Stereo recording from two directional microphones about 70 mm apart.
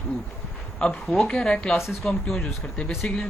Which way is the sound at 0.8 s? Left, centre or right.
Centre.